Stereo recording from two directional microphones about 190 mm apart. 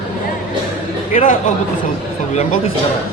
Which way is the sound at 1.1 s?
45° left (ahead or behind).